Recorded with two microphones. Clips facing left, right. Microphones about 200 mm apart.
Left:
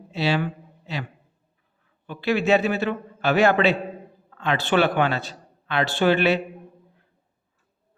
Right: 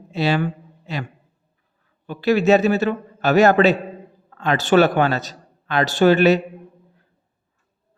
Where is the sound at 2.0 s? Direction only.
40° right (ahead or behind).